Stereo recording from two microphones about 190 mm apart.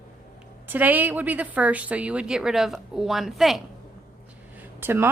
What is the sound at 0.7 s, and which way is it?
A woman's voice, 10° right (ahead or behind).